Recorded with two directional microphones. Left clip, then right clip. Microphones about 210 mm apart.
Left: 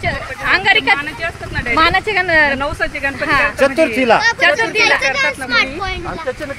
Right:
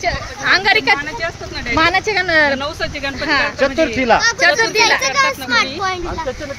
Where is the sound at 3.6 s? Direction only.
50° left (ahead or behind).